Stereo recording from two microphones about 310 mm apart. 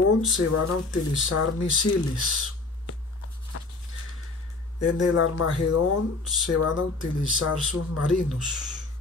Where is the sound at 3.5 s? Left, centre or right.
Left.